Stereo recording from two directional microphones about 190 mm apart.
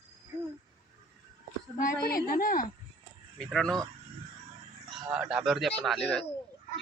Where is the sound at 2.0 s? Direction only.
50° left (ahead or behind).